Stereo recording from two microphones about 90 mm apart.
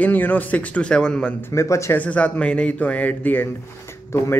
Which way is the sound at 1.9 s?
15° left (ahead or behind).